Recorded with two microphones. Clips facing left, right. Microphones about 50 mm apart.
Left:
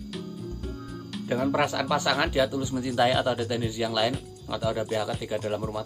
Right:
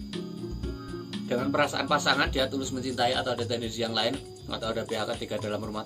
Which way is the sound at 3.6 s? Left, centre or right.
Centre.